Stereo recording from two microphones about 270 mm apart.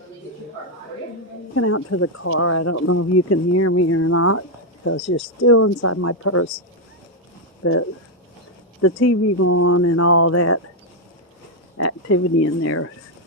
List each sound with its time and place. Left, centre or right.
1.5 s speech: left
5.4 s speech: left
7.6 s speech: left
11.8 s speech: left